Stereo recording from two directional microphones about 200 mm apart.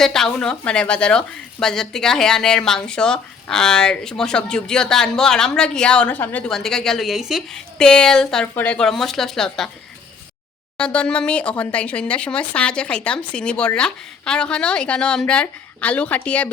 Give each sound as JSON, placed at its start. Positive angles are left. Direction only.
{"t": 0.0, "sound": "speech", "side_deg": 0}
{"t": 10.8, "sound": "speech", "side_deg": 5}